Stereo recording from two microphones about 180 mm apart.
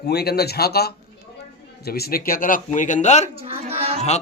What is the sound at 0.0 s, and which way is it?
Speech, 60° left (ahead or behind).